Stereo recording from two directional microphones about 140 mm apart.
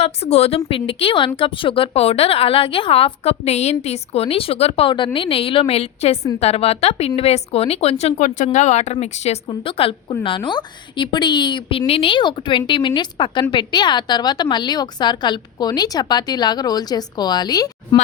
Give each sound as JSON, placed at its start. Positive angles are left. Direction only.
{"t": 0.0, "sound": "a woman's voice", "side_deg": 50}
{"t": 9.5, "sound": "a woman's voice", "side_deg": 40}